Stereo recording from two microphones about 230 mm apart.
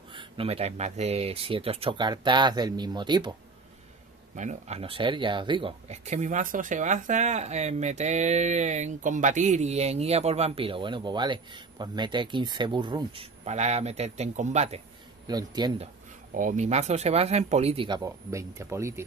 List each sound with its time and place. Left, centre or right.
0.1 s speech: right
4.4 s speech: right
15.2 s speech: centre
16.3 s speech: right; by 19.0 s centre